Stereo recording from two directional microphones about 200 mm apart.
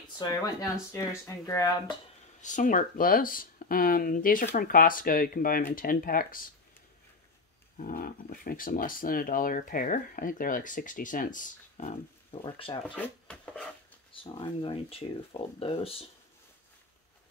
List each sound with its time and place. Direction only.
0.2 s speech: 20° left (ahead or behind)
2.4 s speech: 40° left (ahead or behind)
7.7 s speech: 45° left (ahead or behind)
12.4 s speech: 25° left (ahead or behind)
12.8 s speech: 5° left (ahead or behind)
14.1 s speech: 25° left (ahead or behind)